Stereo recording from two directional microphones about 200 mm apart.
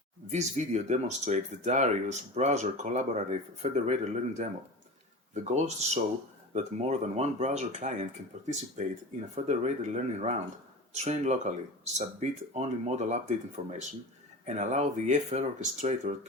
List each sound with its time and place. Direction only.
0.3 s speech: 35° right (ahead or behind)